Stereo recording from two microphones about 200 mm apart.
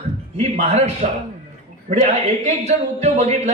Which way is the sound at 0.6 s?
35° right (ahead or behind).